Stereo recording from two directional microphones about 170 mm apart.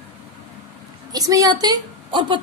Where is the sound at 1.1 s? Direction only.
20° right (ahead or behind).